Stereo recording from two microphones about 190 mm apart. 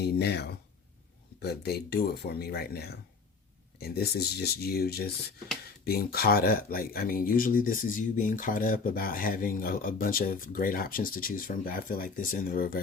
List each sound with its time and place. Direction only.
0.0 s speech: 60° left (ahead or behind)